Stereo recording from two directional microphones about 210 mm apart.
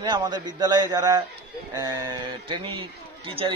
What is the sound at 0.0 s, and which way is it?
A man's voice, 20° right (ahead or behind).